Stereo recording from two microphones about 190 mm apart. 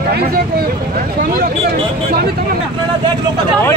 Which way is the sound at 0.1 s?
55° right (ahead or behind).